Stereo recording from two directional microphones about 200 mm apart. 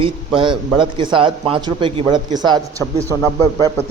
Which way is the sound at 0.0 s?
25° right (ahead or behind).